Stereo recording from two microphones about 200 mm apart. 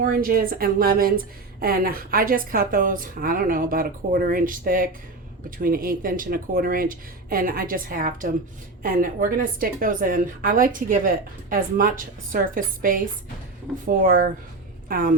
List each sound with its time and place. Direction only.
0.0 s a woman's voice: 45° right (ahead or behind)
14.0 s a woman's voice: 45° right (ahead or behind)